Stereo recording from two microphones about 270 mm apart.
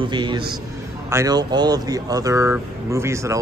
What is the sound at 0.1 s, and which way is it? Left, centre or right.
Speech, centre.